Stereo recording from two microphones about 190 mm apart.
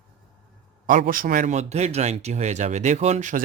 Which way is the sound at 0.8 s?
45° right (ahead or behind).